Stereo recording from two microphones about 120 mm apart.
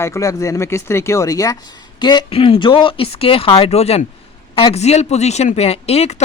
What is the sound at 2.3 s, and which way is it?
Speech, 50° left (ahead or behind).